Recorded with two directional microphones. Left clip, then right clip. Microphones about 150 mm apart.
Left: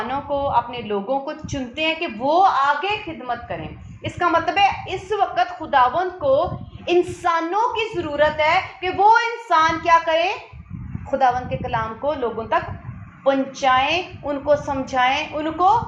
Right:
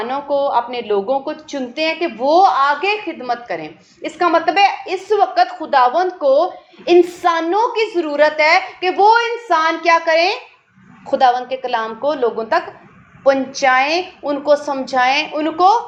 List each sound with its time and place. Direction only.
0.0 s a woman's voice: 30° right (ahead or behind)
1.9 s a woman's voice: 40° right (ahead or behind)
11.1 s a woman's voice: 55° right (ahead or behind)
12.0 s a woman's voice: 40° right (ahead or behind)
13.2 s a woman's voice: 55° right (ahead or behind)
13.8 s a woman's voice: 35° right (ahead or behind)